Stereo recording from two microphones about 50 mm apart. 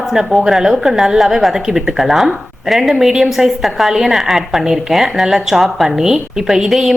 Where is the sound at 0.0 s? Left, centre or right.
Centre.